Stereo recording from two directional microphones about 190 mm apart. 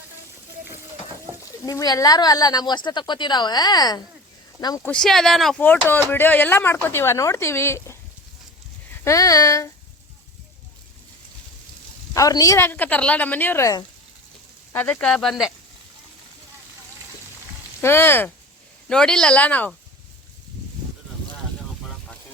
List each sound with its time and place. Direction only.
1.6 s speech: 20° left (ahead or behind)
4.8 s speech: 5° left (ahead or behind)
12.1 s speech: 20° left (ahead or behind); by 15.5 s centre (ahead or behind)
17.7 s speech: 10° left (ahead or behind)